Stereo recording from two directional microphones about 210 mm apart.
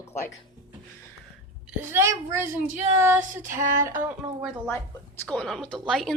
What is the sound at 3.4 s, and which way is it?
Female singing, 40° right (ahead or behind).